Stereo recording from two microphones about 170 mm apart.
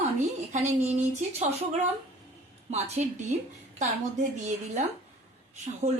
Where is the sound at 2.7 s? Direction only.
40° right (ahead or behind).